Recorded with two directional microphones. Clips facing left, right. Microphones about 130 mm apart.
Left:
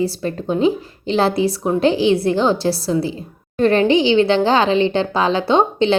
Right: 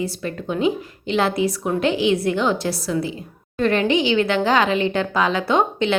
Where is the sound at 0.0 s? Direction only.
35° left (ahead or behind).